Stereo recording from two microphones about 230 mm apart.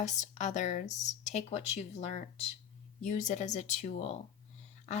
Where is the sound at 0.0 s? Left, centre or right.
Left.